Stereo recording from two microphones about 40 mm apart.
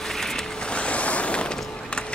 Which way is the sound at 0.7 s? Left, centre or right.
Left.